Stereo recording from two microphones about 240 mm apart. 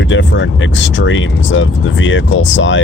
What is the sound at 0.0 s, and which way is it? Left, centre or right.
Speech, left.